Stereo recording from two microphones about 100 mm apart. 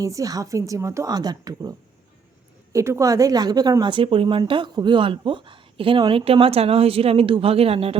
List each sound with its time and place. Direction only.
0.0 s a woman's voice: 35° right (ahead or behind)
2.7 s a woman's voice: 30° right (ahead or behind); by 7.9 s 75° right (ahead or behind)